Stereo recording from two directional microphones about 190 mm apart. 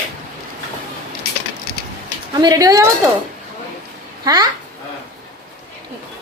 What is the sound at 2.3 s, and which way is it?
Speech, 20° right (ahead or behind).